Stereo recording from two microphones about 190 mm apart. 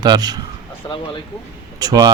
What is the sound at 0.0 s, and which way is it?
Speech, 20° right (ahead or behind).